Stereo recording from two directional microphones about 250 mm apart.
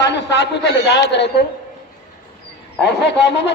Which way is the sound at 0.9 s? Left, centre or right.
Left.